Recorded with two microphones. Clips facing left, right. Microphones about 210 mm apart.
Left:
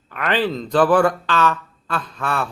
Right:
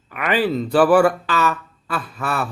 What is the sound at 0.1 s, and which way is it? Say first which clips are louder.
Speech: right 1 dB; 10° right (ahead or behind).